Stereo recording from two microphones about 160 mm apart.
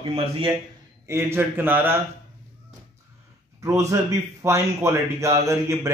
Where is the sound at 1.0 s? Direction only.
15° right (ahead or behind).